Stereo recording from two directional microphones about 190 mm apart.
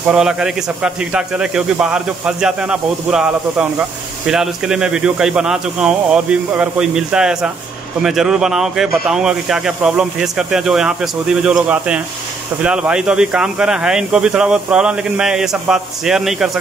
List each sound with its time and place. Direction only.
0.1 s speech: 5° right (ahead or behind)